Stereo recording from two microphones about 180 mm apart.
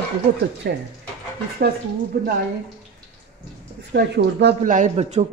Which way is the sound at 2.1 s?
60° right (ahead or behind).